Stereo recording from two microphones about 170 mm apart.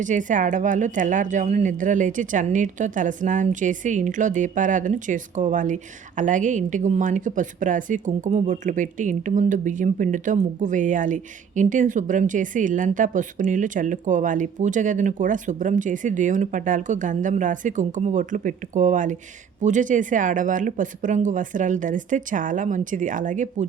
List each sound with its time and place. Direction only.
0.0 s speech: 50° right (ahead or behind)